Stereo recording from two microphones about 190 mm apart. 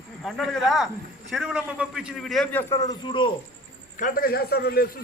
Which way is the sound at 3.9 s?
45° left (ahead or behind).